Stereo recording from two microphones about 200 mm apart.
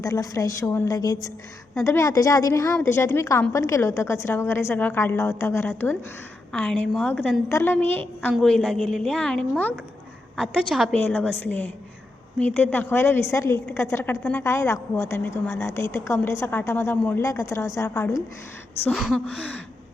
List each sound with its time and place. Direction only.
0.0 s a woman's voice: 15° left (ahead or behind)
18.9 s a woman's voice: centre (ahead or behind)